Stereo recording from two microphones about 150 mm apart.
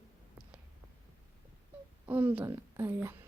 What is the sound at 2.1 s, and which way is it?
A woman's voice, 10° right (ahead or behind).